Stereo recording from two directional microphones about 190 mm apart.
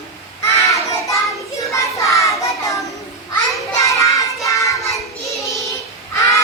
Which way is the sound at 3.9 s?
15° left (ahead or behind).